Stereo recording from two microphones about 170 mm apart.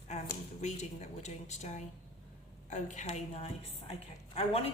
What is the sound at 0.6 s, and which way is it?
A woman's voice, 40° left (ahead or behind).